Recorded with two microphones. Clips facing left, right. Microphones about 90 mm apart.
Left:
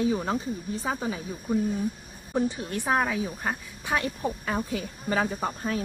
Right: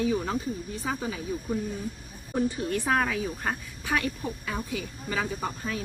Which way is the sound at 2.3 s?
25° left (ahead or behind).